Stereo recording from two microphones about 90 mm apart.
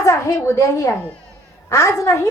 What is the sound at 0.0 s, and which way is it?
A child's voice, 35° left (ahead or behind).